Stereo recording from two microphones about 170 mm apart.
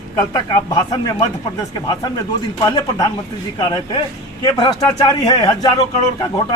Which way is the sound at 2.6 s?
20° left (ahead or behind).